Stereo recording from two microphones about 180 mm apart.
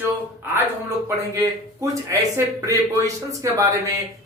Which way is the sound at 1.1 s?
15° right (ahead or behind).